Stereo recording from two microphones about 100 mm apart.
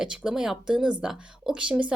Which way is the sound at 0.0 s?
5° right (ahead or behind).